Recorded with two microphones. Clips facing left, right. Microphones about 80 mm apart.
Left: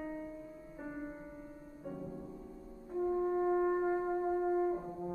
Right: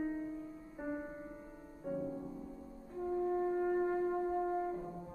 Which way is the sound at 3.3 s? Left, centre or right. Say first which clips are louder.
Left 2 dB; centre.